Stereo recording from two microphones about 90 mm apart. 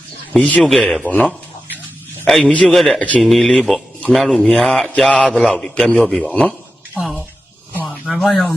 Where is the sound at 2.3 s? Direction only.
5° left (ahead or behind).